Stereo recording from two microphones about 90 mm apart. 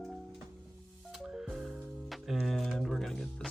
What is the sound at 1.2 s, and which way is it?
Music, 5° right (ahead or behind).